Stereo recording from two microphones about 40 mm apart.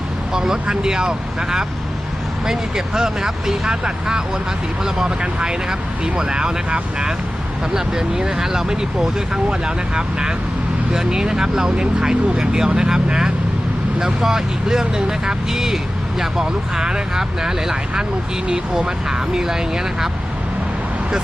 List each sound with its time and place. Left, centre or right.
0.3 s speech: centre